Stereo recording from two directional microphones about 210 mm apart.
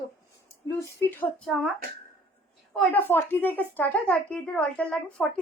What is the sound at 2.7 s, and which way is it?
A woman's voice, 10° left (ahead or behind).